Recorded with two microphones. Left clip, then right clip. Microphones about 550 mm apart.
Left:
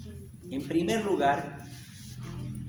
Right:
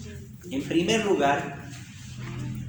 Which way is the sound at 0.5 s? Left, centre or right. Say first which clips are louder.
Right 4 dB; left.